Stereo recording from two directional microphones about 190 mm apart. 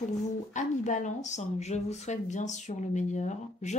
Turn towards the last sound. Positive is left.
turn(degrees=40)  # may be behind; listen again after turning